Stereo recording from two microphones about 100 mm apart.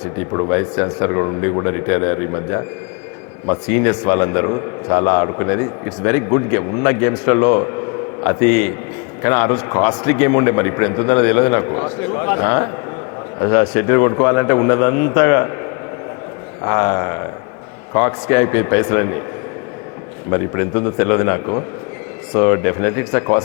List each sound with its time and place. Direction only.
0.3 s a man's voice: 35° left (ahead or behind)
16.6 s a man's voice: 30° left (ahead or behind)
20.3 s a man's voice: 30° left (ahead or behind)